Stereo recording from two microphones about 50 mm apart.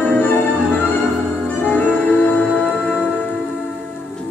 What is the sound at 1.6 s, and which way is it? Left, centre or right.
Music, left.